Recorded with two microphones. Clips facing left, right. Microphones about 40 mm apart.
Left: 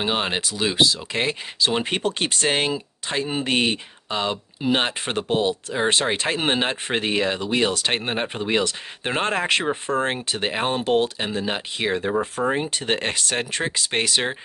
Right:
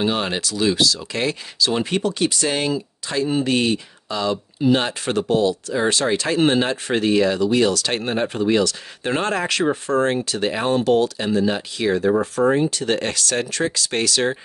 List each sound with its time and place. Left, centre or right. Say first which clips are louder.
0.0 s speech: right 2 dB; left
2.0 s speech: right 3 dB; left